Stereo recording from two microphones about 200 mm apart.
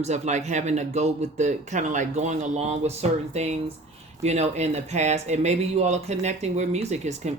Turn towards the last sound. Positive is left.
turn(degrees=-35)  # may be behind; listen again after turning